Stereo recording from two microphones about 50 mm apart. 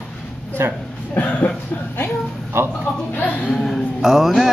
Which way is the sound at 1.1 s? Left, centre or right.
Left.